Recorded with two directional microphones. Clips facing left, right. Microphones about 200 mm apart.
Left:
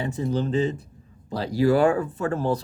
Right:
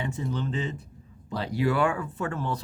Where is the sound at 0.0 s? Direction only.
35° left (ahead or behind).